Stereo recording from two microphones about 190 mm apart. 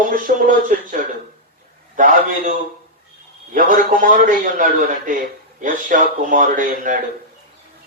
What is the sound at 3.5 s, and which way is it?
Speech, 45° right (ahead or behind).